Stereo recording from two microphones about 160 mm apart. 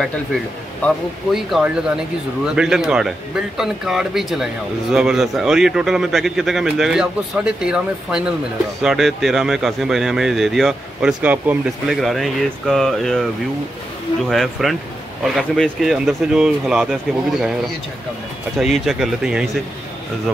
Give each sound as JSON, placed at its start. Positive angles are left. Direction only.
{"t": 0.8, "sound": "speech", "side_deg": 0}
{"t": 14.3, "sound": "speech", "side_deg": 0}
{"t": 18.6, "sound": "speech", "side_deg": 0}